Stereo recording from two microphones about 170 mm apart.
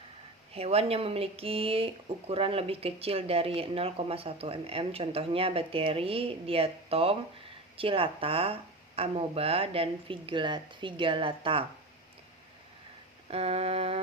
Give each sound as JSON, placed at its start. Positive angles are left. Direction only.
{"t": 0.5, "sound": "speech", "side_deg": -35}
{"t": 13.3, "sound": "speech", "side_deg": -35}